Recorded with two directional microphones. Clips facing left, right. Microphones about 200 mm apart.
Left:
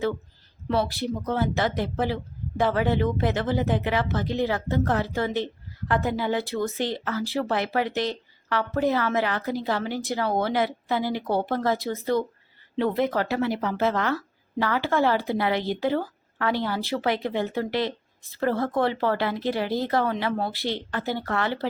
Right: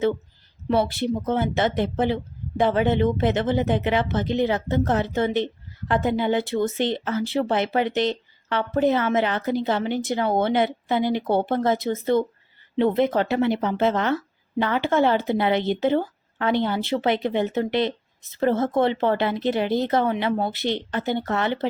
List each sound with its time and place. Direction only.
0.7 s speech: 25° right (ahead or behind)